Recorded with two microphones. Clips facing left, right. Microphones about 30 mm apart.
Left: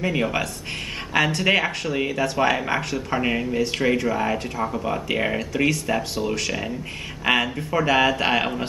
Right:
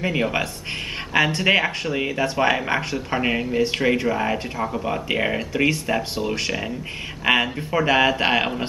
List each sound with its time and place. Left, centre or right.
0.0 s speech: centre
6.1 s speech: right